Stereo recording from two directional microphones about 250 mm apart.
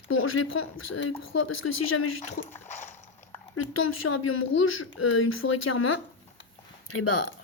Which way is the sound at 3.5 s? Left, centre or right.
Left.